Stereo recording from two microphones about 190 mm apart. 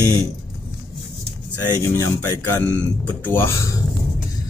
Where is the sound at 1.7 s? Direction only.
15° left (ahead or behind).